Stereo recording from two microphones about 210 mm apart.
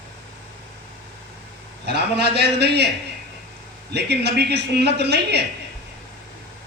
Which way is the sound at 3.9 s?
50° right (ahead or behind).